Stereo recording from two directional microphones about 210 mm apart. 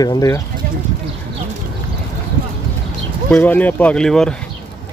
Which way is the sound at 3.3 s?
10° left (ahead or behind).